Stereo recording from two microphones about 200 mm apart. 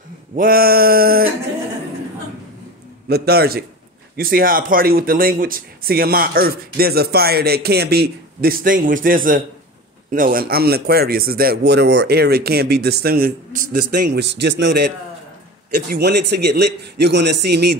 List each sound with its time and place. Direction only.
0.4 s speech: 50° right (ahead or behind)
3.1 s a man's voice: 50° right (ahead or behind)